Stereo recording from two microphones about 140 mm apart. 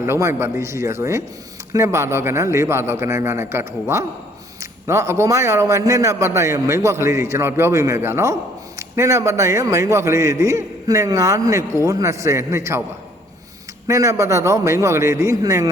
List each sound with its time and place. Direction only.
0.0 s a man's voice: 20° right (ahead or behind)
13.8 s a man's voice: 20° right (ahead or behind)